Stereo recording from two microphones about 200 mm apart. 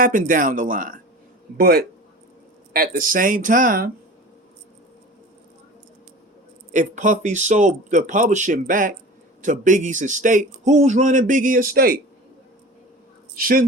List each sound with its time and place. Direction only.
0.0 s speech: 40° right (ahead or behind)
6.7 s a man's voice: 40° right (ahead or behind)
13.3 s speech: 45° right (ahead or behind)